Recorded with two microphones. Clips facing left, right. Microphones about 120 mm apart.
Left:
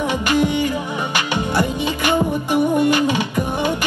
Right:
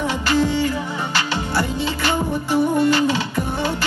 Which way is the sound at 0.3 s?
15° left (ahead or behind).